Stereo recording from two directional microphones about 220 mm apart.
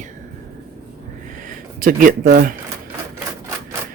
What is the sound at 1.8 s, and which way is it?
Speech, 40° right (ahead or behind).